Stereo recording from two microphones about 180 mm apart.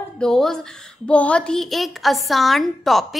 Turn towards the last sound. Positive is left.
turn(degrees=0)  # may be behind; listen again after turning